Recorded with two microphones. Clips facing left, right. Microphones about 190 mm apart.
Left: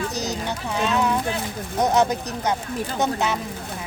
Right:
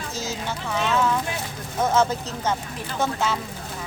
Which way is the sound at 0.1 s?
15° left (ahead or behind).